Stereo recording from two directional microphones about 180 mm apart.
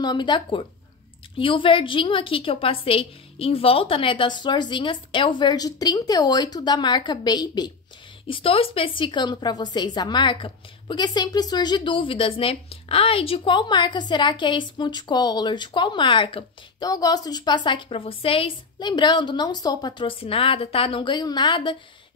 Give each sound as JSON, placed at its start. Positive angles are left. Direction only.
{"t": 0.0, "sound": "a woman's voice", "side_deg": 25}